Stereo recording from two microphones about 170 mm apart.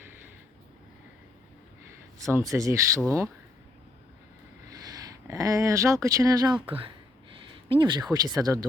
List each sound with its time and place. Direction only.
2.3 s speech: 20° right (ahead or behind)
4.7 s speech: 20° right (ahead or behind)
6.7 s speech: 30° right (ahead or behind)